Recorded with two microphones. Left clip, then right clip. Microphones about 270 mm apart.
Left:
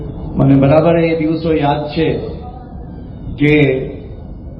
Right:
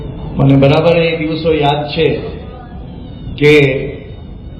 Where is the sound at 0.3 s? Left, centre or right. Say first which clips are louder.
Even; right.